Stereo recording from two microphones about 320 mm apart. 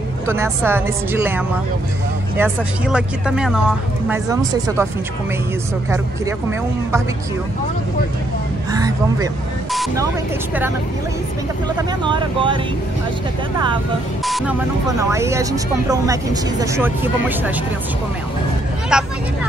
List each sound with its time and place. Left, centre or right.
0.3 s speech: centre
8.7 s speech: centre
9.7 s speech: centre
12.0 s speech: centre
14.2 s speech: centre
18.9 s speech: centre